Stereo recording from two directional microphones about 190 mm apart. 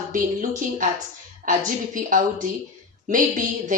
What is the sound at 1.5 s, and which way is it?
Speech, 45° right (ahead or behind).